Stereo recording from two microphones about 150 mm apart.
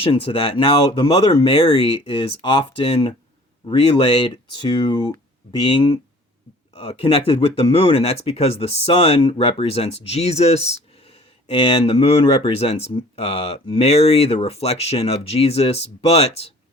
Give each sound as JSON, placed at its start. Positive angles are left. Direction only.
{"t": 0.0, "sound": "speech", "side_deg": 40}
{"t": 6.7, "sound": "speech", "side_deg": 40}